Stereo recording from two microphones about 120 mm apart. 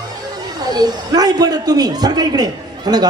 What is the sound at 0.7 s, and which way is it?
A man's voice, 35° right (ahead or behind).